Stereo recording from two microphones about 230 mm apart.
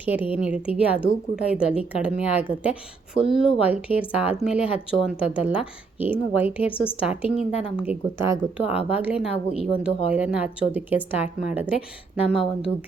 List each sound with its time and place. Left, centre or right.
0.0 s speech: centre